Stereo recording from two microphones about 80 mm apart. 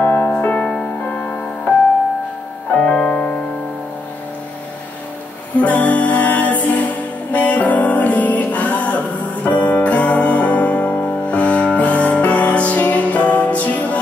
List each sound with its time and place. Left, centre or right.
0.0 s music: left
2.8 s music: centre
5.6 s music: centre